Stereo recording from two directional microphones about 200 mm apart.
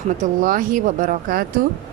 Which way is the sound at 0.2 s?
40° right (ahead or behind).